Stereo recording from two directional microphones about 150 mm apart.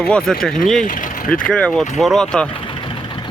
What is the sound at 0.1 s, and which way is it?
Speech, 5° left (ahead or behind).